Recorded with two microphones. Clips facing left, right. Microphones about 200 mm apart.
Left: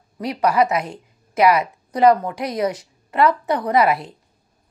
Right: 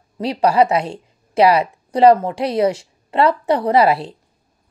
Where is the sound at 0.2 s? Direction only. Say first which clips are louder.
Right 3 dB; 30° right (ahead or behind).